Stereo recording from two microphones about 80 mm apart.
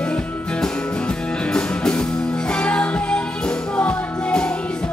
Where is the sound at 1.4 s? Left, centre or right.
Centre.